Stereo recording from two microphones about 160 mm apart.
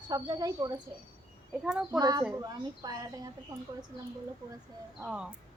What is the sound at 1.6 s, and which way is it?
Speech, 5° right (ahead or behind).